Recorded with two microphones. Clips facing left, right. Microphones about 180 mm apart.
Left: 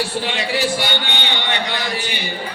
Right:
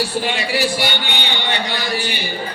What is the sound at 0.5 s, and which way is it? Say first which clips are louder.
A man's voice: left 1 dB; 20° left (ahead or behind).